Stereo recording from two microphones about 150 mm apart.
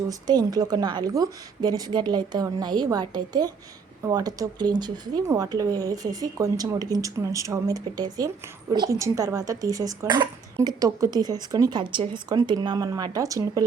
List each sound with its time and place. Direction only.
0.1 s speech: 25° right (ahead or behind)